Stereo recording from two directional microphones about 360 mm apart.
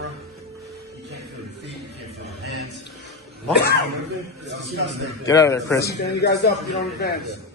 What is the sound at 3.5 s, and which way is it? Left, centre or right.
Speech, left.